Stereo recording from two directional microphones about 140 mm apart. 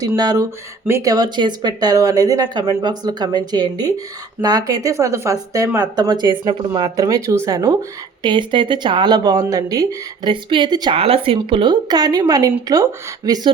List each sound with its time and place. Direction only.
0.0 s speech: 25° right (ahead or behind)
10.9 s speech: 45° right (ahead or behind); by 13.5 s 25° right (ahead or behind)